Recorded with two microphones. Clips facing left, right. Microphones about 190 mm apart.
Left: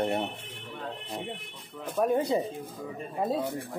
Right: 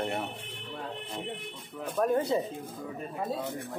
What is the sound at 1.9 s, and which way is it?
Speech, 10° left (ahead or behind).